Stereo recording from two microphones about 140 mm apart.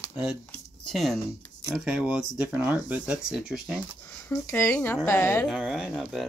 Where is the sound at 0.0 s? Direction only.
10° right (ahead or behind).